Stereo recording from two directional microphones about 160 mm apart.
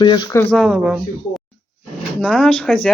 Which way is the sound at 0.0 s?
30° left (ahead or behind).